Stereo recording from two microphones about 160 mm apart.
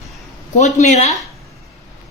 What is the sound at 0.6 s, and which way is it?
Speech, 45° left (ahead or behind).